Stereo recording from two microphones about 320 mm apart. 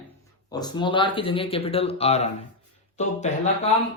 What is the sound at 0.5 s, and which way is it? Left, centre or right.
Speech, centre.